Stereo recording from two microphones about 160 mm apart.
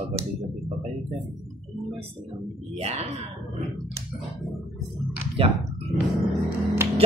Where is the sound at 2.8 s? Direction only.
40° right (ahead or behind).